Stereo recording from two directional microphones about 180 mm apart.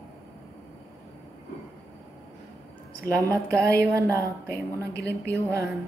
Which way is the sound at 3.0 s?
20° right (ahead or behind).